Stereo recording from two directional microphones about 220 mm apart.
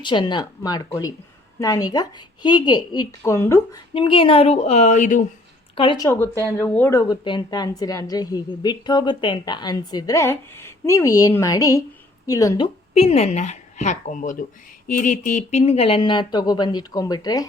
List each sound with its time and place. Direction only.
0.0 s a woman's voice: 20° left (ahead or behind)
3.9 s speech: 25° left (ahead or behind)
5.7 s a woman's voice: 25° left (ahead or behind)
12.9 s speech: 25° left (ahead or behind)